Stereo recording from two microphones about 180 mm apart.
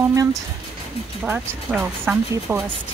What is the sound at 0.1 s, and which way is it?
Music, 20° right (ahead or behind).